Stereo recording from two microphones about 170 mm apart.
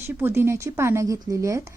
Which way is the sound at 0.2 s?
15° right (ahead or behind).